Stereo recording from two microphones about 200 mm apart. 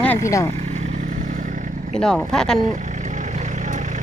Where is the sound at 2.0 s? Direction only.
5° left (ahead or behind).